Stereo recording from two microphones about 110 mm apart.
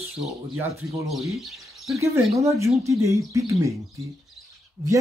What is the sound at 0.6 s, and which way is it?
Speech, 25° right (ahead or behind).